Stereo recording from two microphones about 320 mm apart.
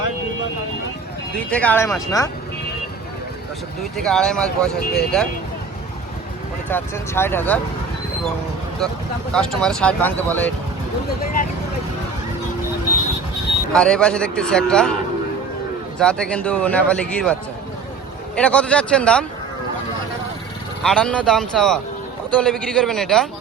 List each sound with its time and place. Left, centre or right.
1.4 s speech: centre
3.9 s a man's voice: centre
6.7 s speech: centre
8.8 s a man's voice: centre
11.2 s speech: left
13.7 s a man's voice: centre
16.0 s a man's voice: centre
18.3 s a man's voice: centre
20.8 s a man's voice: centre